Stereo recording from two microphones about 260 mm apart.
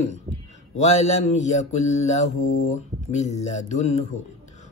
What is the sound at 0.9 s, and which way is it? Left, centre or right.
Mantra, left.